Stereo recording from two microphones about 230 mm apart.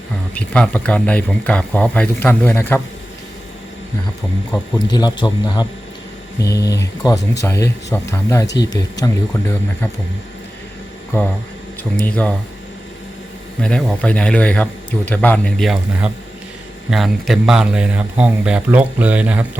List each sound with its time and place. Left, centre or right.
0.3 s speech: centre
4.9 s speech: centre
7.0 s speech: centre
11.8 s speech: centre
13.6 s speech: centre